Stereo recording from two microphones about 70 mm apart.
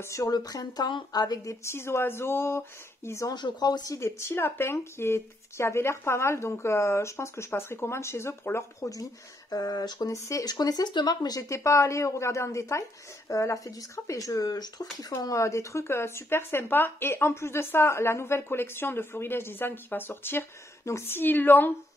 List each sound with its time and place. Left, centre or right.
0.0 s speech: left
0.3 s speech: left
3.3 s speech: left
4.0 s speech: left
10.1 s speech: left
10.4 s speech: left
15.2 s speech: left
21.2 s a woman's voice: left